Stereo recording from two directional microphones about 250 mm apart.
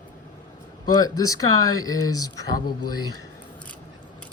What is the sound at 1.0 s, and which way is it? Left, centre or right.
Speech, centre.